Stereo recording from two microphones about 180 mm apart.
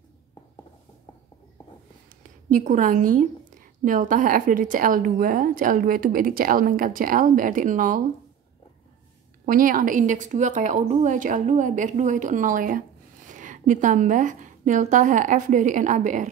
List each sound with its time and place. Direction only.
2.5 s a woman's voice: 45° right (ahead or behind)
9.5 s a woman's voice: 50° right (ahead or behind)